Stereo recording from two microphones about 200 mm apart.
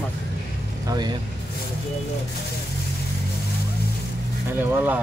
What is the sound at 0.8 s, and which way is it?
Speech, 20° right (ahead or behind).